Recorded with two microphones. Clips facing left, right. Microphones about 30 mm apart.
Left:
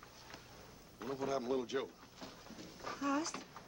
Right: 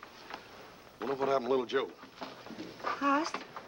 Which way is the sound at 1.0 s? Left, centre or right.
Right.